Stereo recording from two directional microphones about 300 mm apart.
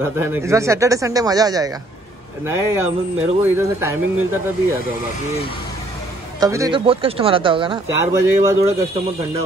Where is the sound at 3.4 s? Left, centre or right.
Centre.